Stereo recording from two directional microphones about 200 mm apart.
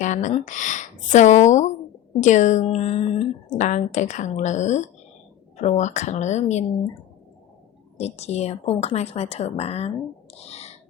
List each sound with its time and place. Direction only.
0.0 s a woman's voice: 35° left (ahead or behind)
7.9 s a woman's voice: 30° left (ahead or behind)